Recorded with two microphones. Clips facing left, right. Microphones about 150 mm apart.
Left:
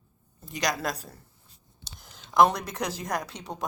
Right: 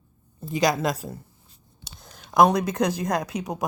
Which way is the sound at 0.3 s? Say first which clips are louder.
Right 7 dB; 25° right (ahead or behind).